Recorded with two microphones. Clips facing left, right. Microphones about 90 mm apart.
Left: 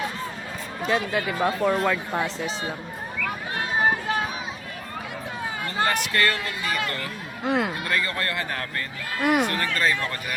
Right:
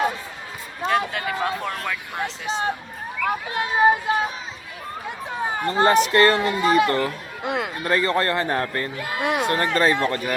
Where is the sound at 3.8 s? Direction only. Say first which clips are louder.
Right 7 dB; 20° right (ahead or behind).